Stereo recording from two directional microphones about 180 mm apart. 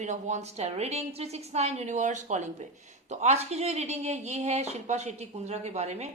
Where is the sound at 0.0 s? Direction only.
40° right (ahead or behind).